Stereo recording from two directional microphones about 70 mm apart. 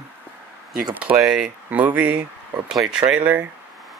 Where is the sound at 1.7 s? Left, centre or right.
Right.